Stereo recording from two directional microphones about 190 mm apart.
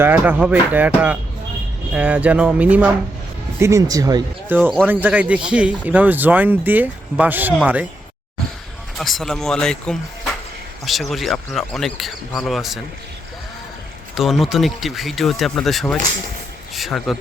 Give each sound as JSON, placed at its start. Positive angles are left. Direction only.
{"t": 0.0, "sound": "speech", "side_deg": -10}
{"t": 9.0, "sound": "speech", "side_deg": 0}
{"t": 14.2, "sound": "speech", "side_deg": 0}